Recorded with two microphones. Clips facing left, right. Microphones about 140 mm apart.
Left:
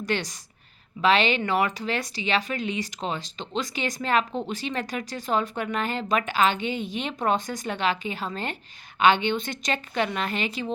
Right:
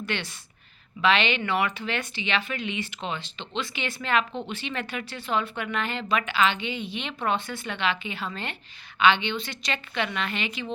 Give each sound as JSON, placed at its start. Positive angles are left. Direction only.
{"t": 0.0, "sound": "a woman's voice", "side_deg": 40}